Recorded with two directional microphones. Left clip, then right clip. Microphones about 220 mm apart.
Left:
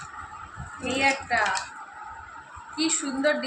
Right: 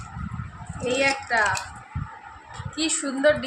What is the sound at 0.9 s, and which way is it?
Speech, 35° right (ahead or behind).